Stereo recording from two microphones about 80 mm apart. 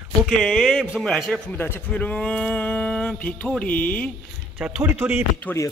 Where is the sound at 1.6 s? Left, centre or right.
Left.